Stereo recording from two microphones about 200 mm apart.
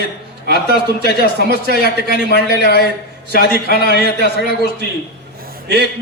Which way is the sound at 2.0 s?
50° left (ahead or behind).